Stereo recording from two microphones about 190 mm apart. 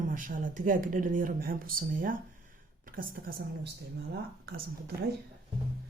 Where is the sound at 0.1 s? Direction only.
45° right (ahead or behind).